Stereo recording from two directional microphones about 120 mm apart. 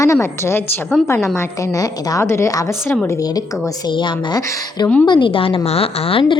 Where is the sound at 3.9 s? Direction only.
40° left (ahead or behind).